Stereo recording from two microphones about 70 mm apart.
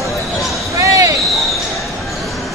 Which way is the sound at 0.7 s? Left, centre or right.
Right.